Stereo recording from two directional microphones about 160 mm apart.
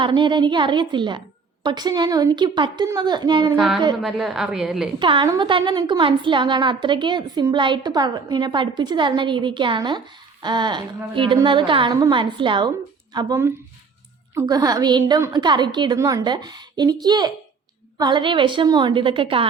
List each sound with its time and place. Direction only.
0.0 s a woman's voice: 30° right (ahead or behind)
4.0 s a woman's voice: centre (ahead or behind)
4.9 s a woman's voice: 30° right (ahead or behind)